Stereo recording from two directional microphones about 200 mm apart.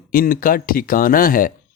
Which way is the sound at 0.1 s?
45° left (ahead or behind).